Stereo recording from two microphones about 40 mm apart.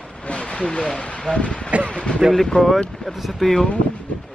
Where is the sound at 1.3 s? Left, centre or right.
Left.